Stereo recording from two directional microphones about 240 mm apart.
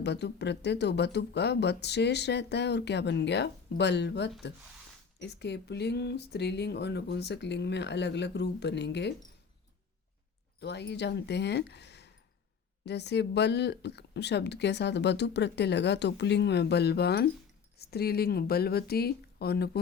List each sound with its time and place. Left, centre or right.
0.0 s speech: left
10.6 s speech: left